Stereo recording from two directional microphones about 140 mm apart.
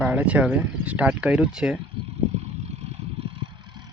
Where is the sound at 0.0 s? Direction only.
10° right (ahead or behind).